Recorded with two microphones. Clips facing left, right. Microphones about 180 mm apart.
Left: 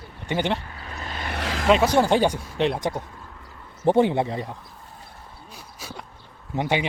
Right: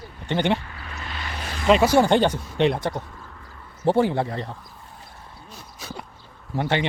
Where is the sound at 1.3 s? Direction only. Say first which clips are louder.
Left 8 dB; 80° left.